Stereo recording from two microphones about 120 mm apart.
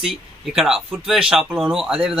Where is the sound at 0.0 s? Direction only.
5° right (ahead or behind).